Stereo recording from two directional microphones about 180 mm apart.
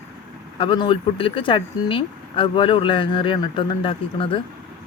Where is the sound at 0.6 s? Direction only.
30° left (ahead or behind).